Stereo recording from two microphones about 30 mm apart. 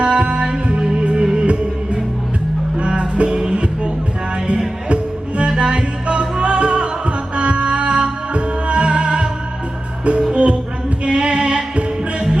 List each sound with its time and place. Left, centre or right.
0.0 s music: right
1.4 s music: right
5.4 s music: right
10.3 s music: right